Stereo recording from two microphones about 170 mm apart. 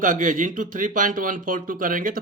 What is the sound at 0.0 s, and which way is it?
Speech, 50° right (ahead or behind).